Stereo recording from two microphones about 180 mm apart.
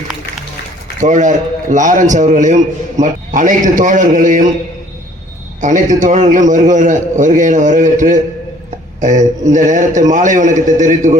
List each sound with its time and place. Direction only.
0.9 s a man's voice: 45° right (ahead or behind)
5.5 s a man's voice: 45° right (ahead or behind)